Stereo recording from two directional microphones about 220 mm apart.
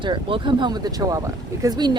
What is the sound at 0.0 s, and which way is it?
Speech, 20° right (ahead or behind).